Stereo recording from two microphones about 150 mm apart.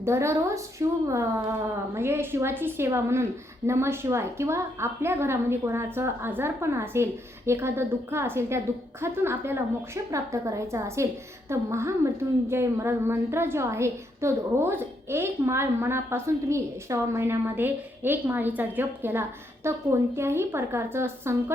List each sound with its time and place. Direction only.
0.0 s a woman's voice: 20° right (ahead or behind)